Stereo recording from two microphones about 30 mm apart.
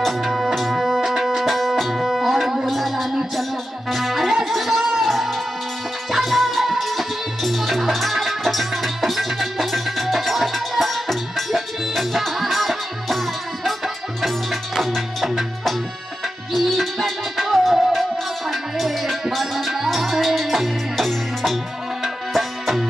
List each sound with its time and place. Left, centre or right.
0.7 s music: centre
1.0 s music: centre
1.4 s music: centre
4.5 s a sound: centre
5.0 s music: centre
14.2 s music: centre
16.5 s music: centre